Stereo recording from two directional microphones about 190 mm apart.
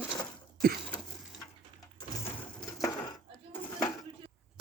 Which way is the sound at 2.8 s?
15° left (ahead or behind).